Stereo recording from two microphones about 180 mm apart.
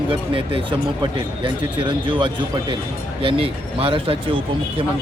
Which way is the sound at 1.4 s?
30° right (ahead or behind).